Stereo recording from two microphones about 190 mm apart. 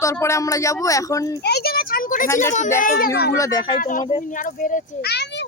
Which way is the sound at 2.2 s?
15° left (ahead or behind).